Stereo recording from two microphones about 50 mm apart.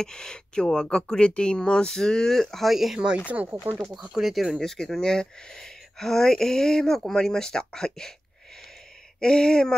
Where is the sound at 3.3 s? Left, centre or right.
Right.